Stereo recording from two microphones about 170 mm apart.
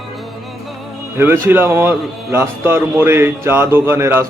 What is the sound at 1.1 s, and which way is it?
A man's voice, 15° right (ahead or behind).